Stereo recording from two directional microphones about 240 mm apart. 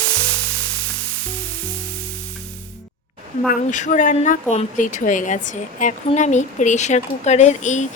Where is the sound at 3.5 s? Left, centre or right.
Left.